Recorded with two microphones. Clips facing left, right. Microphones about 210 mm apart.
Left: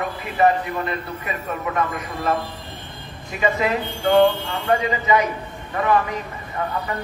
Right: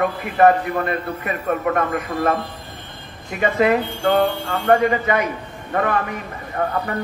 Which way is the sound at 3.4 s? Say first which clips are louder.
Right 4 dB; 55° right (ahead or behind).